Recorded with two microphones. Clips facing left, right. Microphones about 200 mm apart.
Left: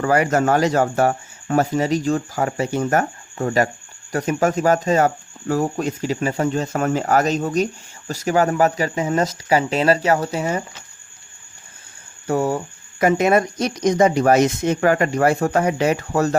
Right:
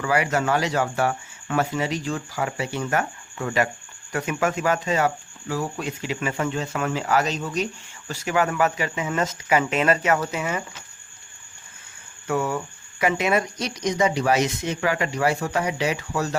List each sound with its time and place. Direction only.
0.0 s speech: 45° left (ahead or behind)
12.3 s speech: 40° left (ahead or behind)